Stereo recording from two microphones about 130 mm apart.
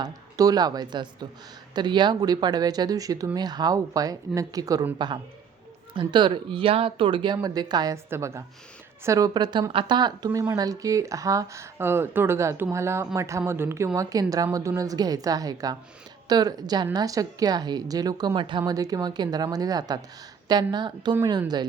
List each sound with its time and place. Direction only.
0.0 s a woman's voice: 30° right (ahead or behind)
8.1 s a woman's voice: 20° right (ahead or behind)